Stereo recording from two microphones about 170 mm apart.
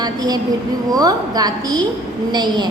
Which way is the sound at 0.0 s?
25° right (ahead or behind).